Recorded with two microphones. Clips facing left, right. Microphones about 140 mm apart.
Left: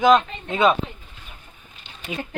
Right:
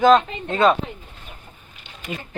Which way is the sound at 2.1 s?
Centre (ahead or behind).